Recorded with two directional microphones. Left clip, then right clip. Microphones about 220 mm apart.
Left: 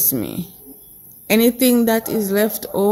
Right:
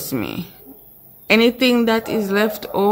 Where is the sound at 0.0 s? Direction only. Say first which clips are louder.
Left 1 dB; 15° left (ahead or behind).